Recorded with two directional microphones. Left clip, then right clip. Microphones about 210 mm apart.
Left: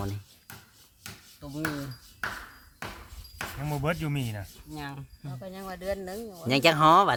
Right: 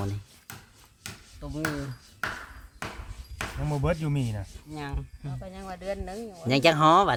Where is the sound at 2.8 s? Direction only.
40° right (ahead or behind).